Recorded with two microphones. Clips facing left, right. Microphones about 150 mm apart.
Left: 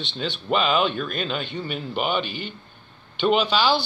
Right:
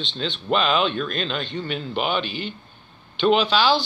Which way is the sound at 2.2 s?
50° left (ahead or behind).